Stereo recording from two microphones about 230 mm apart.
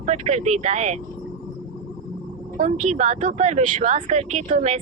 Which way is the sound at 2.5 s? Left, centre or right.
Right.